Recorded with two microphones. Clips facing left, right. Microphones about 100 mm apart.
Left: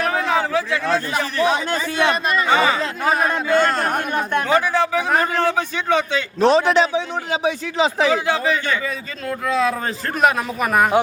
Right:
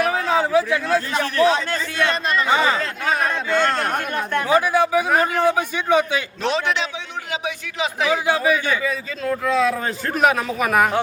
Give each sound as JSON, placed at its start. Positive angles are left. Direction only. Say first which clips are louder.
{"t": 0.0, "sound": "a sound", "louder": "even", "side_deg": -10}
{"t": 1.1, "sound": "speech", "louder": "right 1 dB", "side_deg": 10}
{"t": 3.1, "sound": "a man's voice", "louder": "left 3 dB", "side_deg": 5}
{"t": 4.1, "sound": "speech", "louder": "left 2 dB", "side_deg": 15}
{"t": 4.4, "sound": "a man's voice", "louder": "right 3 dB", "side_deg": -15}
{"t": 6.4, "sound": "speech", "louder": "left 10 dB", "side_deg": 35}
{"t": 8.1, "sound": "a man's voice", "louder": "even", "side_deg": -10}